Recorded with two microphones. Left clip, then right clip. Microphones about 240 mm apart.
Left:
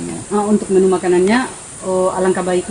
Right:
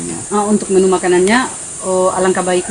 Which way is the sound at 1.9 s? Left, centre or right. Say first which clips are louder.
Right 2 dB; centre.